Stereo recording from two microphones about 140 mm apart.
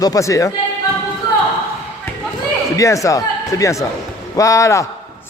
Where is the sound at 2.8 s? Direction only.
25° left (ahead or behind).